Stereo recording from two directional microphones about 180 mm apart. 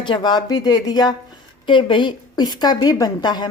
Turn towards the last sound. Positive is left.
turn(degrees=25)  # may be behind; listen again after turning